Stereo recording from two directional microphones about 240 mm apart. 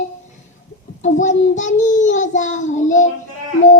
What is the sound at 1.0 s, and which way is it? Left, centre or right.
Child singing, left.